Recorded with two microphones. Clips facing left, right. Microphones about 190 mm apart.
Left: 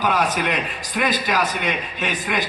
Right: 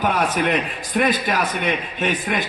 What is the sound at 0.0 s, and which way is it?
A man's voice, 50° right (ahead or behind).